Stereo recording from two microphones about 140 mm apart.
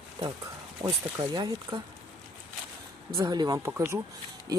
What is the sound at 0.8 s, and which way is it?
Speech, 25° right (ahead or behind).